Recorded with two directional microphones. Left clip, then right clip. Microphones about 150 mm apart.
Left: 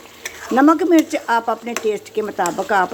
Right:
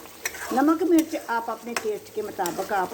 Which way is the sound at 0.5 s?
45° left (ahead or behind).